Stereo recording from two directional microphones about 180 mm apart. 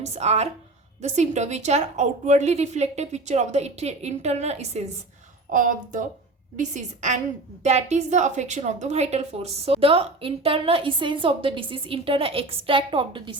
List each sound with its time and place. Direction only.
0.0 s a woman's voice: 35° right (ahead or behind)